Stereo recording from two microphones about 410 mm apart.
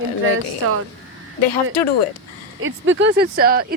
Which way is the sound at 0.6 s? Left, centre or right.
Right.